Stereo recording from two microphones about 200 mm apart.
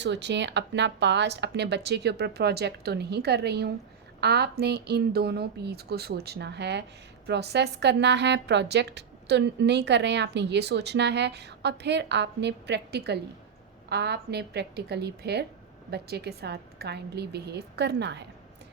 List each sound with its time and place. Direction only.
0.0 s a woman's voice: 60° right (ahead or behind)